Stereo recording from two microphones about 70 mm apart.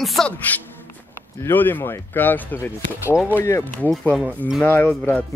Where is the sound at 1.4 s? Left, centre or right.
Left.